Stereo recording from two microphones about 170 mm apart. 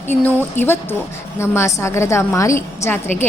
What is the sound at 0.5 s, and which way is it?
A woman's voice, 15° left (ahead or behind).